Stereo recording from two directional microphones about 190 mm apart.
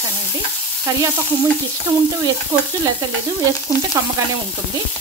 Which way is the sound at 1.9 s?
25° right (ahead or behind).